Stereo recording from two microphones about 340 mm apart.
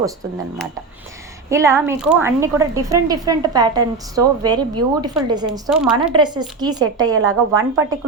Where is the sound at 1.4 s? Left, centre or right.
Centre.